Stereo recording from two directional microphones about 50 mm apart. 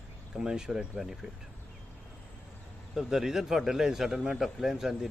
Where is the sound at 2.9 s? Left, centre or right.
Centre.